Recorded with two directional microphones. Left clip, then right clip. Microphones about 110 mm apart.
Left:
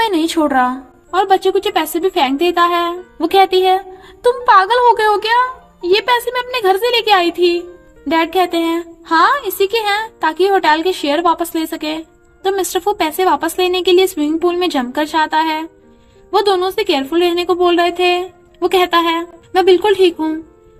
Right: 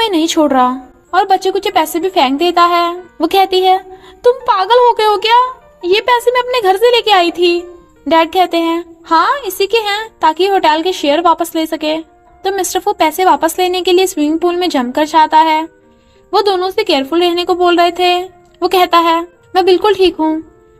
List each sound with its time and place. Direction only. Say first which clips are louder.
0.0 s a woman's voice: right 3 dB; 45° right (ahead or behind)